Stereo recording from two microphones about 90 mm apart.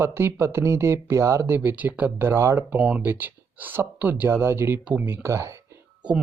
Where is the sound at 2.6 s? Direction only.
10° right (ahead or behind).